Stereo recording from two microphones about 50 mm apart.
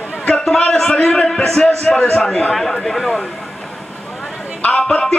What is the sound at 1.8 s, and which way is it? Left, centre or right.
Speech, left.